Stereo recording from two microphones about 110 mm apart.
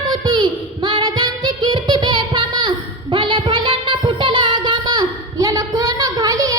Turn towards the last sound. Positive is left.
turn(degrees=-35)  # may be behind; listen again after turning